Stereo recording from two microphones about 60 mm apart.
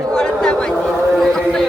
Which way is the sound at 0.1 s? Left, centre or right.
Centre.